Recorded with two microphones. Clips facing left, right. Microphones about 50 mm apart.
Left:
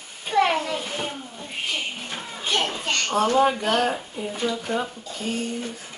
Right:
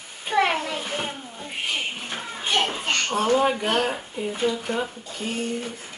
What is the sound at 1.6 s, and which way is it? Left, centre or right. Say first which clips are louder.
Children playing: right 1 dB; right.